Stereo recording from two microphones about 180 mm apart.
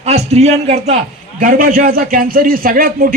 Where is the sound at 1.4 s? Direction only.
50° right (ahead or behind).